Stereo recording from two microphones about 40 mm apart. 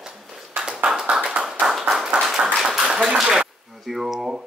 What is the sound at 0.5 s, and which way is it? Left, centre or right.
Clapping, right.